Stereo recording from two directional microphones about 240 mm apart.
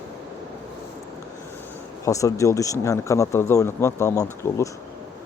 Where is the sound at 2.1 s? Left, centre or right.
Centre.